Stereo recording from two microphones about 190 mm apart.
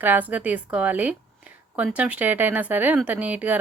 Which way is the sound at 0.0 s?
10° right (ahead or behind).